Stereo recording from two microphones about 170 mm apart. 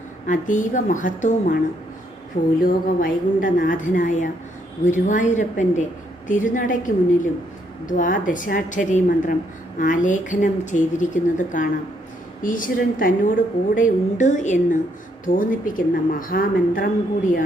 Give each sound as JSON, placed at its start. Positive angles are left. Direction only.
{"t": 0.3, "sound": "a woman's voice", "side_deg": 50}
{"t": 2.6, "sound": "a woman's voice", "side_deg": 55}